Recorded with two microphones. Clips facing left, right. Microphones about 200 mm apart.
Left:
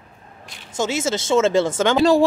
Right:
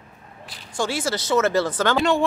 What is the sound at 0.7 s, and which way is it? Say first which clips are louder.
Speech: left 3 dB; 20° left (ahead or behind).